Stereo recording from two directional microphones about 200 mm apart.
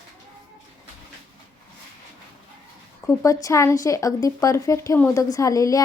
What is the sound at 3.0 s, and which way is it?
A woman's voice, 15° left (ahead or behind).